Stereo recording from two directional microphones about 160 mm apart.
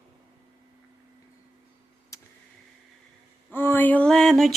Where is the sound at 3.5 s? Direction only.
10° left (ahead or behind).